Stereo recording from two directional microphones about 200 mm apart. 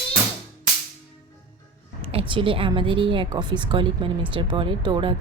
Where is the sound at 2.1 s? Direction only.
25° right (ahead or behind).